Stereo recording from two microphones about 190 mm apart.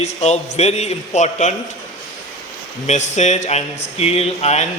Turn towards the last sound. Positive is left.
turn(degrees=35)  # may be behind; listen again after turning